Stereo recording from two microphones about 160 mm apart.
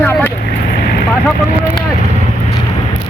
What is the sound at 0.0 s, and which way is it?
Vehicle, 15° left (ahead or behind).